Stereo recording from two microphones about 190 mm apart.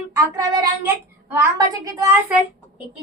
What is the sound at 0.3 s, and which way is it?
Child singing, 20° right (ahead or behind).